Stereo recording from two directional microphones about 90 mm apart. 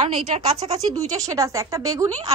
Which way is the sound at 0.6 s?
40° right (ahead or behind).